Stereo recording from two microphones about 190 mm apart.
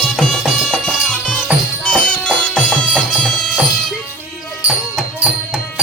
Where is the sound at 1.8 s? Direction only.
5° left (ahead or behind).